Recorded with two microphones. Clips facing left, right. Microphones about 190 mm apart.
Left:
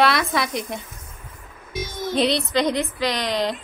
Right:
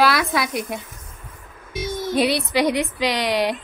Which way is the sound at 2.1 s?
5° right (ahead or behind).